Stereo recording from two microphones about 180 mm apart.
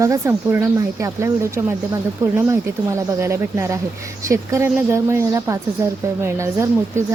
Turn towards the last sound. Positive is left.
turn(degrees=-15)  # may be behind; listen again after turning